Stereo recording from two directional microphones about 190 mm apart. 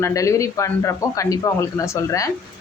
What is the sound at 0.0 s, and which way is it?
A woman's voice, 15° left (ahead or behind).